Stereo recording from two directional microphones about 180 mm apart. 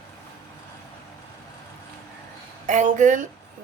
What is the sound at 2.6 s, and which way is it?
Speech, 45° right (ahead or behind).